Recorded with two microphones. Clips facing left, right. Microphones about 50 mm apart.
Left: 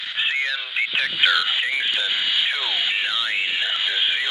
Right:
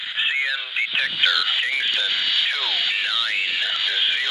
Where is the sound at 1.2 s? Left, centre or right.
Centre.